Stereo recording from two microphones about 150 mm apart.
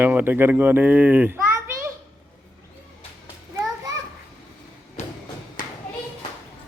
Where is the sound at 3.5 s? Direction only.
20° right (ahead or behind).